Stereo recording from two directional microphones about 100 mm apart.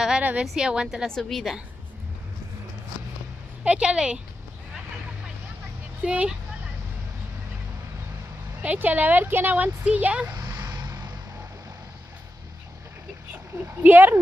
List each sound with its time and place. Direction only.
0.0 s speech: 10° right (ahead or behind)
1.0 s a woman's voice: 5° left (ahead or behind)
3.6 s speech: 10° right (ahead or behind)
6.0 s speech: 10° right (ahead or behind)
8.6 s speech: 15° right (ahead or behind)
10.3 s vehicle: 35° right (ahead or behind)
13.8 s speech: 20° right (ahead or behind)